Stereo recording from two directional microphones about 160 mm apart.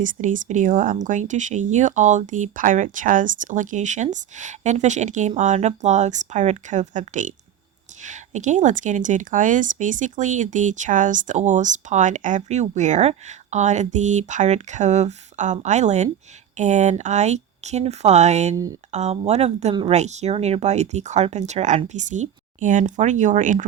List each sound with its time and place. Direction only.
0.0 s speech: 55° right (ahead or behind)